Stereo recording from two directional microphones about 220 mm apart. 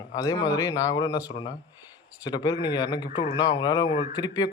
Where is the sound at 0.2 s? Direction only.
15° left (ahead or behind).